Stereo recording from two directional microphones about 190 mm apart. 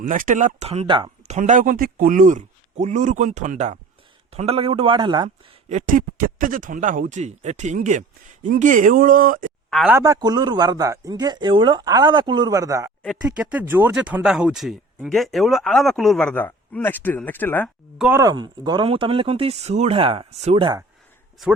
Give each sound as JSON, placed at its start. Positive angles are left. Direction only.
{"t": 0.0, "sound": "speech", "side_deg": -45}
{"t": 1.4, "sound": "a man's voice", "side_deg": -40}
{"t": 5.6, "sound": "speech", "side_deg": -40}
{"t": 9.6, "sound": "speech", "side_deg": 0}
{"t": 9.9, "sound": "a man's voice", "side_deg": -20}
{"t": 17.9, "sound": "speech", "side_deg": -5}
{"t": 18.2, "sound": "a man's voice", "side_deg": -20}